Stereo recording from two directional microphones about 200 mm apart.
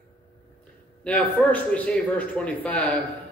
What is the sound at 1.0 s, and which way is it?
A man's voice, 5° left (ahead or behind).